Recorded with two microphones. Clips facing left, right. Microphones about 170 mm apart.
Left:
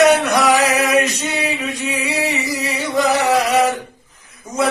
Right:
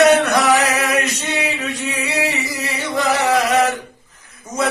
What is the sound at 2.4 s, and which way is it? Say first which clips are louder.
Chant: left 3 dB; 15° left (ahead or behind).